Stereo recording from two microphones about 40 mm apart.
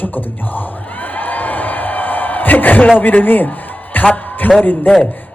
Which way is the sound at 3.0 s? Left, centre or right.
Left.